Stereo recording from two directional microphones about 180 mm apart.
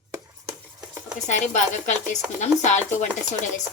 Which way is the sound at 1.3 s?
40° left (ahead or behind).